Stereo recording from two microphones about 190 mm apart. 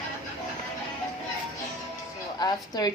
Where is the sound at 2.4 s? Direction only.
20° left (ahead or behind).